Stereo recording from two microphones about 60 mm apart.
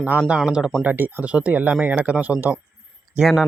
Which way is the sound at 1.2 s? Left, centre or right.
Right.